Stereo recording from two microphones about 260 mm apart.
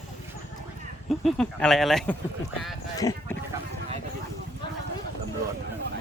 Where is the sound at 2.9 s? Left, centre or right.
Centre.